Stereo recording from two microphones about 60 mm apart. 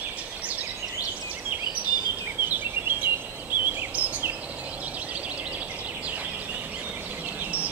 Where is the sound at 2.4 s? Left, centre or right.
Right.